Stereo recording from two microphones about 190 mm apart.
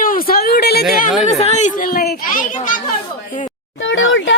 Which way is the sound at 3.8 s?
85° left.